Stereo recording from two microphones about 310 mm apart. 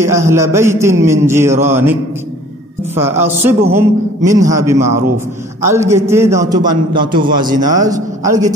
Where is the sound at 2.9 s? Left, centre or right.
Centre.